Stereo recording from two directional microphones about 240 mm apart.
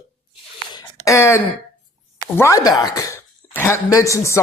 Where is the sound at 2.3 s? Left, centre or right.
Centre.